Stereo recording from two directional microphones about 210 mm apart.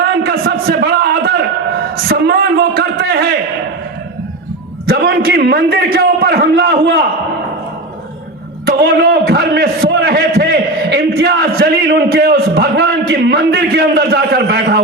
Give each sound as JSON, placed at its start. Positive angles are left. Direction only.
{"t": 0.2, "sound": "a sound", "side_deg": -45}
{"t": 4.9, "sound": "a man's voice", "side_deg": -50}
{"t": 8.6, "sound": "a man's voice", "side_deg": -45}